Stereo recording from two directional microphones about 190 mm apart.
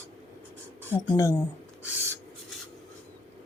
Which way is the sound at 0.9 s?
15° left (ahead or behind).